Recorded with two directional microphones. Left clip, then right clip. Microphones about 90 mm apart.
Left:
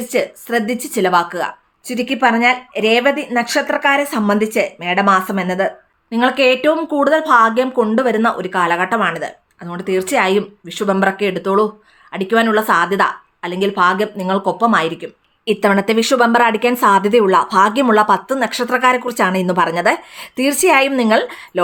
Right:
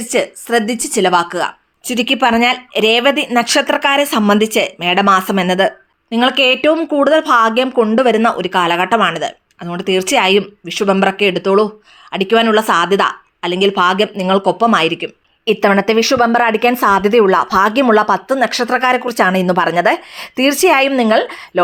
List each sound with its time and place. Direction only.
0.0 s speech: 30° right (ahead or behind)
1.9 s speech: 60° right (ahead or behind)
6.1 s speech: 45° right (ahead or behind)
15.4 s speech: 10° right (ahead or behind)